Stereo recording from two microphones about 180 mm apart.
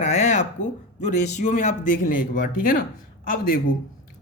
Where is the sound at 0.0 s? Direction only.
40° left (ahead or behind).